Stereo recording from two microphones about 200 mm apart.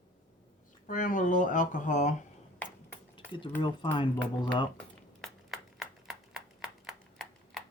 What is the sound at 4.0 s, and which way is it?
Speech, 25° left (ahead or behind).